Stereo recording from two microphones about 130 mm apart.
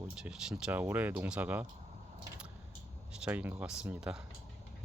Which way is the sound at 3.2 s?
10° right (ahead or behind).